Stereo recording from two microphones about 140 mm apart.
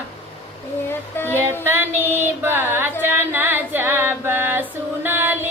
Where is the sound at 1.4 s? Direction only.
15° right (ahead or behind).